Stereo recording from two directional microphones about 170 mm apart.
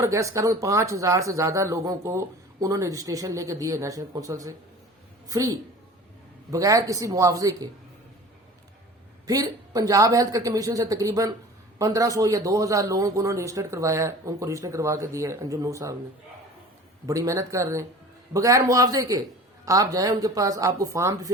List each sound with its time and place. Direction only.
0.0 s a man's voice: 15° right (ahead or behind)
9.2 s a man's voice: 20° right (ahead or behind)
17.1 s a man's voice: 20° right (ahead or behind)